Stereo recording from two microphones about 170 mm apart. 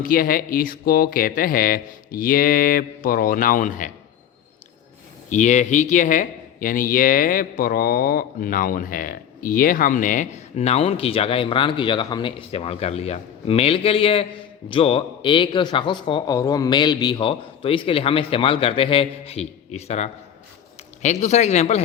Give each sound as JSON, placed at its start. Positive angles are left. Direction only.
{"t": 0.0, "sound": "speech", "side_deg": 55}
{"t": 5.3, "sound": "speech", "side_deg": 45}